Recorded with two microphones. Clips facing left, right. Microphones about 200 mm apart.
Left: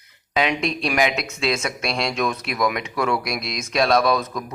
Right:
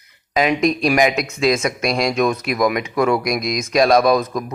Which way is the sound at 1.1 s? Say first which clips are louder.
Right 6 dB; 50° right (ahead or behind).